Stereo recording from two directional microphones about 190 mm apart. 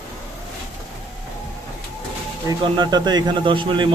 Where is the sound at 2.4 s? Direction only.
25° right (ahead or behind).